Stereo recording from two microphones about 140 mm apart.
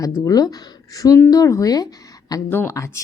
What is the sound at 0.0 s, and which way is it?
Speech, 25° left (ahead or behind).